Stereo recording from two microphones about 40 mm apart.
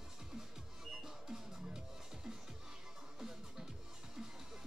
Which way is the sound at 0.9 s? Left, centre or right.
Centre.